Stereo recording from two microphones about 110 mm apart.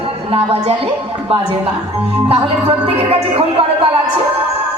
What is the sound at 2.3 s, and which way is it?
Speech, 60° right (ahead or behind).